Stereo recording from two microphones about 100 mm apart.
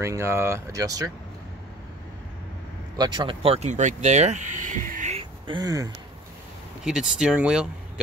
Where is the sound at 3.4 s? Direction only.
85° right.